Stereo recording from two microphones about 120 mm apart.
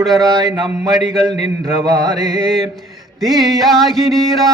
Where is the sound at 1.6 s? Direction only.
30° right (ahead or behind).